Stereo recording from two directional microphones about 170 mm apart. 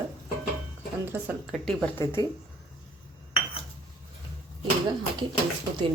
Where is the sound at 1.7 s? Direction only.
5° left (ahead or behind).